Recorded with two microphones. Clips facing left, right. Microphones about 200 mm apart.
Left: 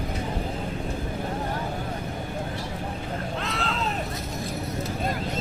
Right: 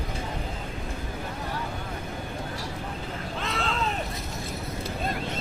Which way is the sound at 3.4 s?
Centre (ahead or behind).